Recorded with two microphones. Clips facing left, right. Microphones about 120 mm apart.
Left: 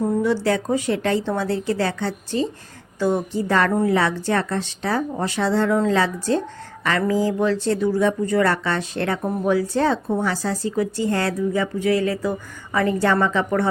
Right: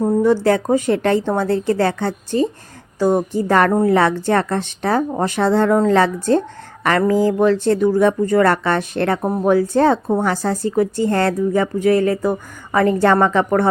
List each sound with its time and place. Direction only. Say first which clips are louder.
0.0 s speech: right 5 dB; 40° right (ahead or behind)
3.7 s speech: right 5 dB; 40° right (ahead or behind)